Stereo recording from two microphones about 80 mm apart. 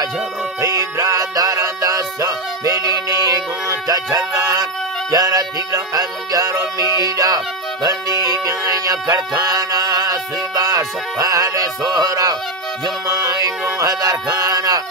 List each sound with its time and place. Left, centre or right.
0.6 s music: right
12.8 s speech: right